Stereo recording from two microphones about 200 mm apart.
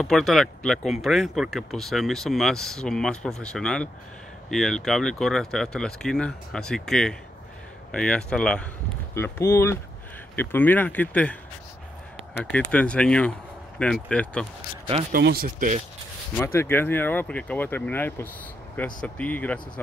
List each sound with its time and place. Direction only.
0.0 s speech: centre (ahead or behind)
12.4 s speech: 5° left (ahead or behind)
15.1 s speech: 50° right (ahead or behind)
16.3 s speech: 10° left (ahead or behind)